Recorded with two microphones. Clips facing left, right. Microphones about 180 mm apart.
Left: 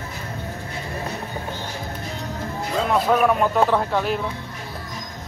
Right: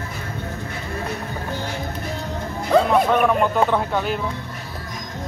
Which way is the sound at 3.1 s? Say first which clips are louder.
Even; centre (ahead or behind).